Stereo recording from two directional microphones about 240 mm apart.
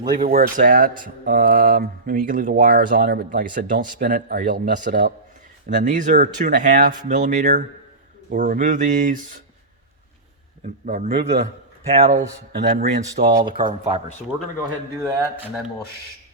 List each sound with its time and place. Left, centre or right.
0.0 s speech: right
10.8 s speech: right
12.1 s speech: right
15.0 s a sound: centre